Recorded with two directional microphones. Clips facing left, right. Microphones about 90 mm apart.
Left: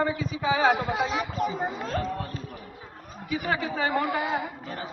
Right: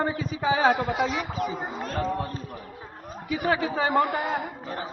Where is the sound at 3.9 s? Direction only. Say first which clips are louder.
Right 3 dB; 50° right (ahead or behind).